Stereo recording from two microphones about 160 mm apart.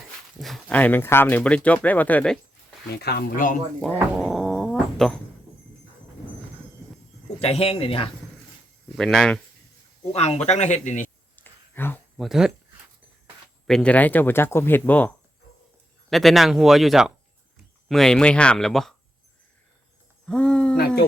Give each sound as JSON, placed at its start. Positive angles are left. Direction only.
{"t": 0.3, "sound": "speech", "side_deg": 0}
{"t": 2.9, "sound": "speech", "side_deg": 85}
{"t": 4.2, "sound": "cat", "side_deg": 0}
{"t": 7.3, "sound": "speech", "side_deg": 40}
{"t": 9.0, "sound": "speech", "side_deg": 5}
{"t": 10.0, "sound": "speech", "side_deg": 40}
{"t": 11.3, "sound": "a sound", "side_deg": 10}
{"t": 12.1, "sound": "speech", "side_deg": 0}
{"t": 13.7, "sound": "speech", "side_deg": 5}
{"t": 20.2, "sound": "speech", "side_deg": 5}
{"t": 20.7, "sound": "speech", "side_deg": 75}